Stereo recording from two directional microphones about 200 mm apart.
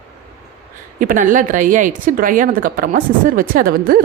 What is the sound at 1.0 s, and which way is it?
Speech, 40° right (ahead or behind).